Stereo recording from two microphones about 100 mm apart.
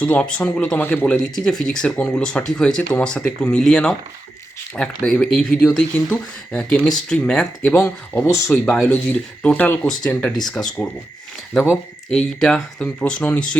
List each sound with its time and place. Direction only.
0.0 s speech: 10° left (ahead or behind)
0.8 s speech: 20° left (ahead or behind)
1.0 s speech: 5° left (ahead or behind)
5.0 s speech: 5° left (ahead or behind)
8.4 s speech: centre (ahead or behind)
8.9 s speech: 15° left (ahead or behind)
12.1 s speech: 5° left (ahead or behind)